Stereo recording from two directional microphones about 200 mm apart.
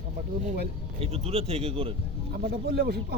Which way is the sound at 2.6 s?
55° right (ahead or behind).